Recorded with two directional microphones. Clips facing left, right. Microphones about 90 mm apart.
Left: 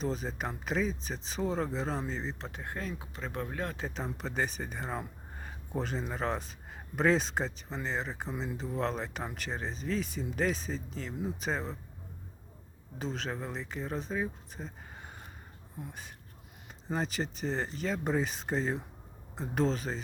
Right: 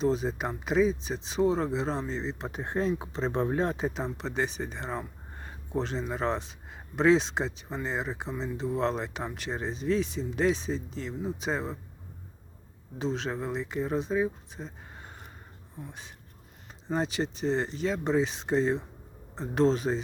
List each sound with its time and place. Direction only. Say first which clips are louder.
0.0 s speech: right 7 dB; centre (ahead or behind)
2.5 s speech: right 10 dB; 25° right (ahead or behind)
3.9 s speech: right 3 dB; centre (ahead or behind)
13.0 s speech: right 5 dB; centre (ahead or behind)